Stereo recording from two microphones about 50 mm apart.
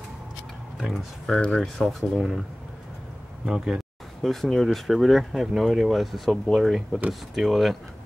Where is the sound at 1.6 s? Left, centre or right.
Centre.